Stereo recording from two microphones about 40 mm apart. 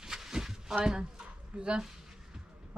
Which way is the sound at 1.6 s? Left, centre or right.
Right.